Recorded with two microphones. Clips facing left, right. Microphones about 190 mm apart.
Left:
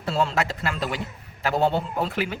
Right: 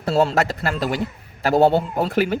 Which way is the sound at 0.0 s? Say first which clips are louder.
Right 6 dB; 40° right (ahead or behind).